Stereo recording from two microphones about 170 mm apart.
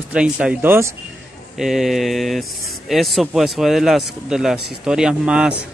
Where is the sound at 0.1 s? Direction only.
5° right (ahead or behind).